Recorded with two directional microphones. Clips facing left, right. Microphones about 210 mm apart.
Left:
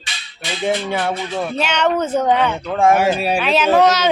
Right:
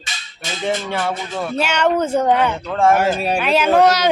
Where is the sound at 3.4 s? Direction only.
10° right (ahead or behind).